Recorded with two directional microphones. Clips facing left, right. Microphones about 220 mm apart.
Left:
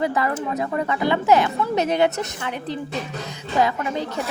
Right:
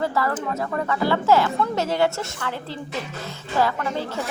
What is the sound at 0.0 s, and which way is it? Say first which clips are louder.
A woman's voice: left 1 dB; 20° left (ahead or behind).